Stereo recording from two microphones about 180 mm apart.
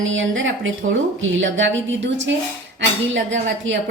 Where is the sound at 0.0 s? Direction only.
90° right.